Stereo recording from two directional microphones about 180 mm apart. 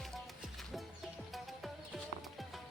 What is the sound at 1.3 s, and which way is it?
Music, centre (ahead or behind).